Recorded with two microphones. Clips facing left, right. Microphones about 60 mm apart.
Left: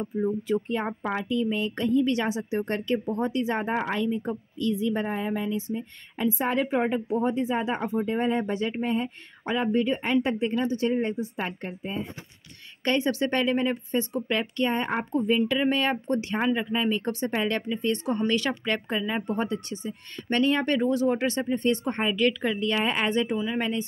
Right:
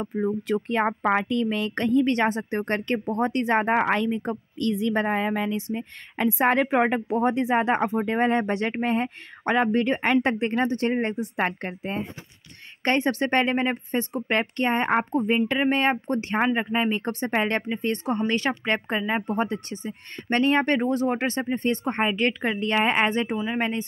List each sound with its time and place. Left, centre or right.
0.0 s speech: right
12.8 s speech: right